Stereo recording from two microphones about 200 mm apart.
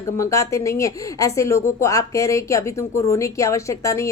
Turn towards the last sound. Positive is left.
turn(degrees=15)  # may be behind; listen again after turning